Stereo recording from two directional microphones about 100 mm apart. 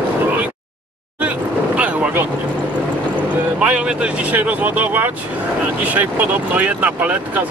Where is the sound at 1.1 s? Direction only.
15° right (ahead or behind).